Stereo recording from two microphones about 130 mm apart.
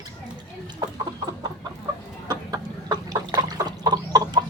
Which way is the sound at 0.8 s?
30° right (ahead or behind).